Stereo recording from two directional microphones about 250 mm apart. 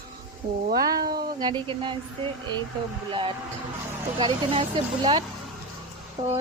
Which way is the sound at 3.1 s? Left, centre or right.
Centre.